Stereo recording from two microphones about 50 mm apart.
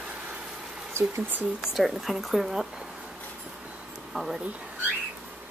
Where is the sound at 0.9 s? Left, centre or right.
Right.